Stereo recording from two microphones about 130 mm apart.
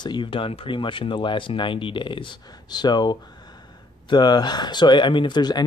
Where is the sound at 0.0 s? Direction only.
35° left (ahead or behind).